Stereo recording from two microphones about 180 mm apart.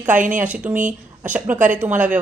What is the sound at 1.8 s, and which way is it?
Speech, 10° right (ahead or behind).